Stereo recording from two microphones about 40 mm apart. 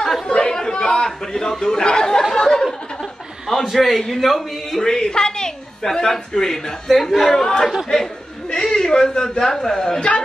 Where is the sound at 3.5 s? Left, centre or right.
Centre.